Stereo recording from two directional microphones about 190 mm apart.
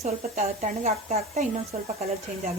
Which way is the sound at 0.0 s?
35° right (ahead or behind).